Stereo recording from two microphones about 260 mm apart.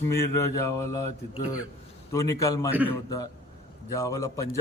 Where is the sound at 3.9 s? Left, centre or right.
Centre.